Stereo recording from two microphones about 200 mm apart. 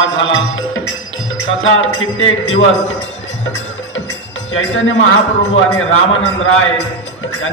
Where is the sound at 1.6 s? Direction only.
80° left.